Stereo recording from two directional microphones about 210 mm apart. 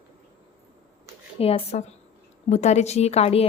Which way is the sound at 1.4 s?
30° left (ahead or behind).